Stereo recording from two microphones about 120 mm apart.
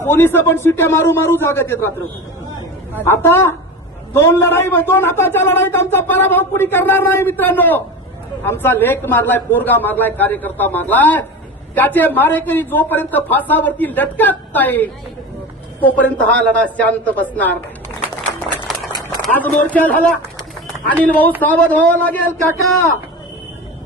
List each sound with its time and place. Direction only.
0.0 s a man's voice: 20° left (ahead or behind)
3.0 s a man's voice: 20° left (ahead or behind)
19.3 s speech: 15° left (ahead or behind)